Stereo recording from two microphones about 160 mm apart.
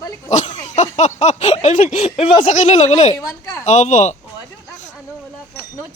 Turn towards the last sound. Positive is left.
turn(degrees=50)  # may be behind; listen again after turning